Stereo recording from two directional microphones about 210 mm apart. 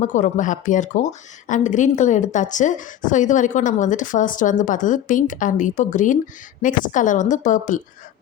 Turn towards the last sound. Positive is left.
turn(degrees=35)  # may be behind; listen again after turning